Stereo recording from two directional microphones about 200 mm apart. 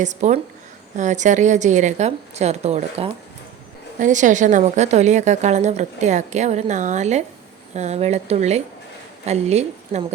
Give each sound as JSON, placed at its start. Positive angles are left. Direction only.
{"t": 0.0, "sound": "a woman's voice", "side_deg": -35}